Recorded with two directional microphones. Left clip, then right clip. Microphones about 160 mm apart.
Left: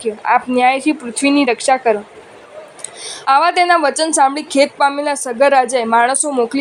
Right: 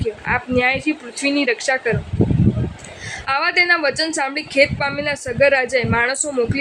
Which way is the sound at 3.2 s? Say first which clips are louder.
Left 5 dB; 25° left (ahead or behind).